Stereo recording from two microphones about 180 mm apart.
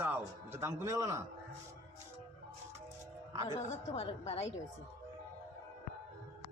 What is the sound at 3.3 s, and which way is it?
Music, 20° right (ahead or behind).